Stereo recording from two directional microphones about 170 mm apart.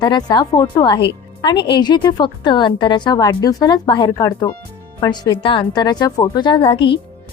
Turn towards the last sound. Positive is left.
turn(degrees=30)  # may be behind; listen again after turning